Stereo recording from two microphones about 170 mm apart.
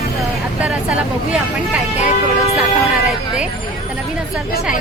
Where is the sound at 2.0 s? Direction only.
40° left (ahead or behind).